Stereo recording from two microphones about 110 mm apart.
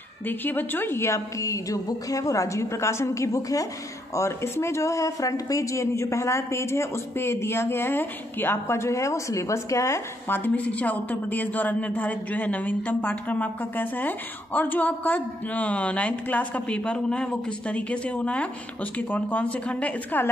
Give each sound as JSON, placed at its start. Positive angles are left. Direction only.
{"t": 0.3, "sound": "a woman's voice", "side_deg": 15}